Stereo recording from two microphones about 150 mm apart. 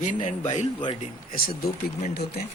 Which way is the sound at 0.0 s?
55° left (ahead or behind).